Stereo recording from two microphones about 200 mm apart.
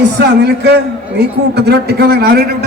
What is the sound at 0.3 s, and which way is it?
A man's voice, 55° right (ahead or behind).